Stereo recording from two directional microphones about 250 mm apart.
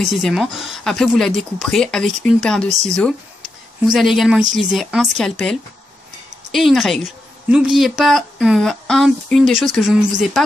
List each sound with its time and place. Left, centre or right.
0.0 s a woman's voice: centre